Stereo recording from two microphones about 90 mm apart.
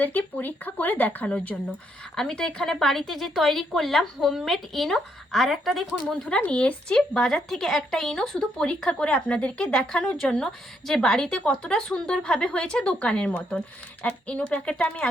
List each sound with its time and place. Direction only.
0.0 s speech: 20° left (ahead or behind); by 5.8 s centre (ahead or behind)
6.2 s speech: 15° left (ahead or behind)